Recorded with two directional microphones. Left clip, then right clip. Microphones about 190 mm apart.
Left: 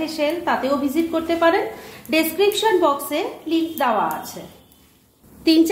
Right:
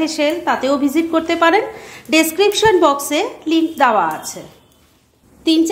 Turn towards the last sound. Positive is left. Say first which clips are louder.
# right 1 dB
turn(degrees=-10)  # may be behind; listen again after turning